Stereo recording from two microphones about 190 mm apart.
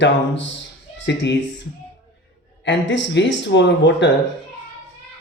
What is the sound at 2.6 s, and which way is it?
Speech, 75° left (ahead or behind).